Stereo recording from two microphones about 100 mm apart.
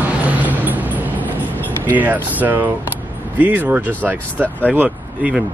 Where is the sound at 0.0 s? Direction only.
15° right (ahead or behind).